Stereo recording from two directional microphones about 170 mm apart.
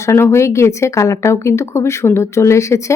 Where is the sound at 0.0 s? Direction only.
15° left (ahead or behind).